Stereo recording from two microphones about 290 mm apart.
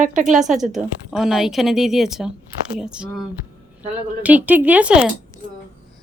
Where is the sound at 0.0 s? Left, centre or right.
Right.